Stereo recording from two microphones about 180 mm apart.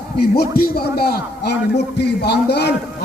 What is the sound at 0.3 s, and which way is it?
A man's voice, 55° left (ahead or behind).